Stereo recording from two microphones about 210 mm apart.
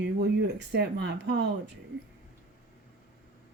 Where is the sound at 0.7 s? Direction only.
55° right (ahead or behind).